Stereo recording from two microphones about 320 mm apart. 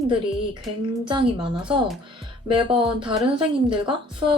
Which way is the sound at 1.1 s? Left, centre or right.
Centre.